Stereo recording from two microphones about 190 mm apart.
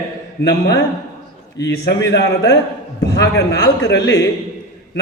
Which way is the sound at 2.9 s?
60° left (ahead or behind).